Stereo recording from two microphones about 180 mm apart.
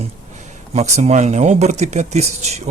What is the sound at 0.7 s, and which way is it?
Speech, 40° right (ahead or behind).